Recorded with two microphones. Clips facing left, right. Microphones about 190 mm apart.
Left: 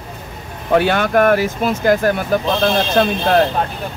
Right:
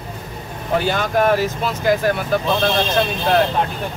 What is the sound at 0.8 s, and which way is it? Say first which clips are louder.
Speech: left 4 dB; 60° left (ahead or behind).